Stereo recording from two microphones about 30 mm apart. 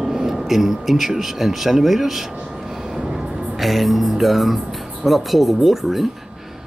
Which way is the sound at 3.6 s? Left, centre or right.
Centre.